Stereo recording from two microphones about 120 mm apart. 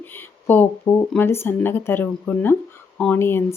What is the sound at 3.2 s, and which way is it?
Speech, 20° left (ahead or behind).